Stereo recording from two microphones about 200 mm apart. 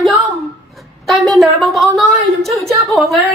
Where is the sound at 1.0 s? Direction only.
Centre (ahead or behind).